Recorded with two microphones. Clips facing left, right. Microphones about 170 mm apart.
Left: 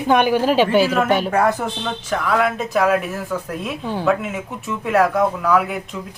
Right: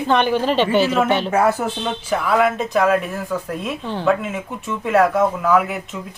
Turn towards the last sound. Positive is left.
turn(degrees=0)  # may be behind; listen again after turning